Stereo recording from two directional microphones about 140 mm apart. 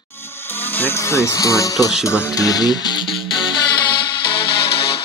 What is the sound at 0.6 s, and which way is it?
Speech, 15° left (ahead or behind).